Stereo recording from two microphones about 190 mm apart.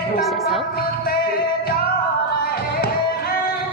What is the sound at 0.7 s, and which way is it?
Music, 55° left (ahead or behind).